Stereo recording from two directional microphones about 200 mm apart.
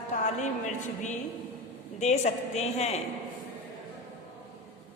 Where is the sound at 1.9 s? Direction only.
35° left (ahead or behind).